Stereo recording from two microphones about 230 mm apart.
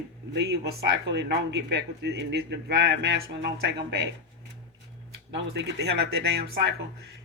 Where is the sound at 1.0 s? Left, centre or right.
Right.